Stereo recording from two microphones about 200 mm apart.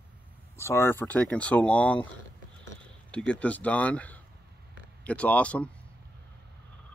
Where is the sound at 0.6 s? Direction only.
10° left (ahead or behind).